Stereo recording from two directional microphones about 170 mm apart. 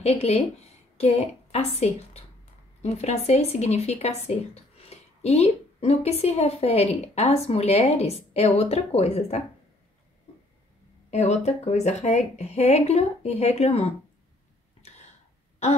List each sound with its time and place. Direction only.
0.0 s speech: 40° left (ahead or behind)
11.1 s speech: 40° left (ahead or behind)